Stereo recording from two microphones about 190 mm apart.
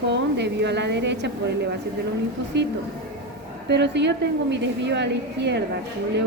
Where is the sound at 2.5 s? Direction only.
65° right (ahead or behind).